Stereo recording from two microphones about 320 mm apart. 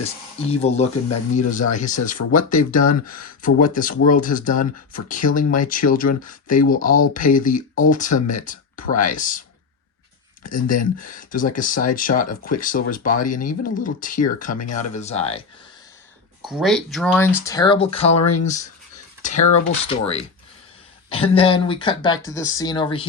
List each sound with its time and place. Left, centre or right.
0.0 s speech: centre
5.2 s speech: left
5.6 s speech: left
10.4 s speech: left
16.4 s speech: centre